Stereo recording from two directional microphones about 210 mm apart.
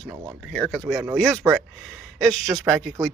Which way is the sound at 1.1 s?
5° left (ahead or behind).